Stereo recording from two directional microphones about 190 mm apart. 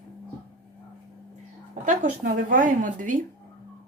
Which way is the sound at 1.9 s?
45° right (ahead or behind).